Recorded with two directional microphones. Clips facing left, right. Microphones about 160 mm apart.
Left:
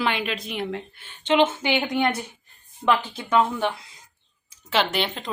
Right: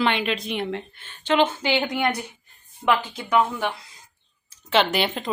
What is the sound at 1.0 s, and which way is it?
Speech, 15° left (ahead or behind).